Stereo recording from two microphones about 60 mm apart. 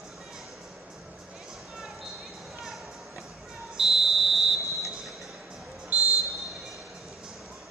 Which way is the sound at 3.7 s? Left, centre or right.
Centre.